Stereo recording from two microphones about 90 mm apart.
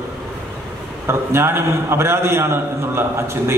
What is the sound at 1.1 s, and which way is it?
A man's voice, 30° right (ahead or behind).